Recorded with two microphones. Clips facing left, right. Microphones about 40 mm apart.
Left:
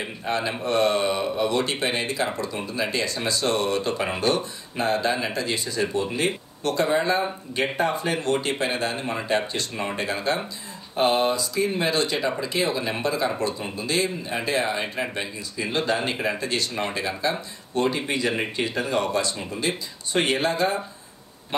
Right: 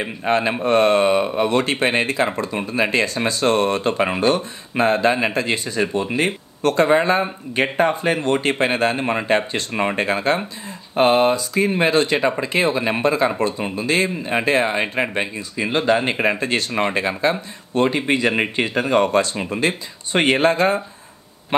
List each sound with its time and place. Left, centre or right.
0.0 s speech: right